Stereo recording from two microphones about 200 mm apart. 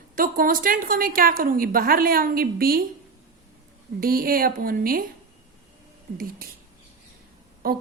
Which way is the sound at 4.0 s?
45° right (ahead or behind).